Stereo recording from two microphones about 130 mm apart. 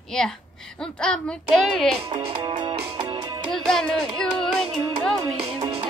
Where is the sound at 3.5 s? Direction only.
5° left (ahead or behind).